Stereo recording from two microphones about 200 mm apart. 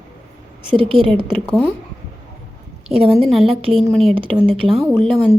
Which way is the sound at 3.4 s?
30° right (ahead or behind).